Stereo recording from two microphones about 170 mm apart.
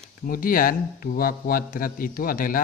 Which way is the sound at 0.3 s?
55° left (ahead or behind).